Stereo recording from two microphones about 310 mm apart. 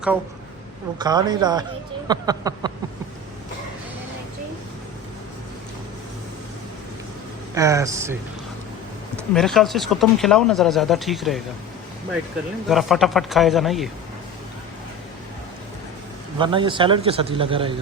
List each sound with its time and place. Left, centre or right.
0.9 s a man's voice: centre
7.5 s a man's voice: centre
9.1 s speech: centre
12.6 s speech: centre
16.4 s a man's voice: centre